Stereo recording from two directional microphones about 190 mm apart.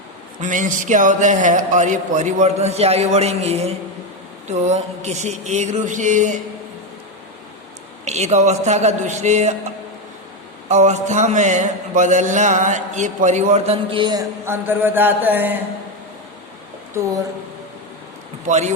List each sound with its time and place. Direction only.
0.4 s mantra: 40° right (ahead or behind)
8.0 s mantra: 35° right (ahead or behind)
10.7 s mantra: 40° right (ahead or behind); by 15.6 s 10° right (ahead or behind)
18.4 s mantra: 40° right (ahead or behind)